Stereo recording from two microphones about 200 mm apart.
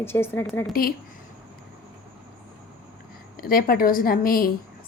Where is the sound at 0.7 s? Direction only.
45° left (ahead or behind).